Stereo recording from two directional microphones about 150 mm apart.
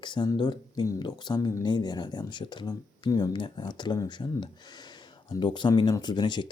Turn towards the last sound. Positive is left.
turn(degrees=30)  # may be behind; listen again after turning